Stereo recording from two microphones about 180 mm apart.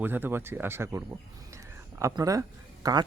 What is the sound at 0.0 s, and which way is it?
Speech, 10° right (ahead or behind).